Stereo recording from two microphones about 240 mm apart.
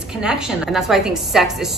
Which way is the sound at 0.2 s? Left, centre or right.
Centre.